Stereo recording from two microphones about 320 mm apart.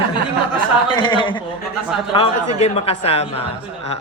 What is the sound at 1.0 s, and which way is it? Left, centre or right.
Speech, centre.